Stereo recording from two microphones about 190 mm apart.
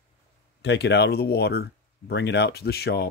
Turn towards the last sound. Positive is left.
turn(degrees=55)  # may be behind; listen again after turning